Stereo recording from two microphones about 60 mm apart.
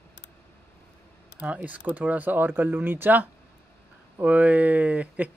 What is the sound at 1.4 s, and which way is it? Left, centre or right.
Speech, right.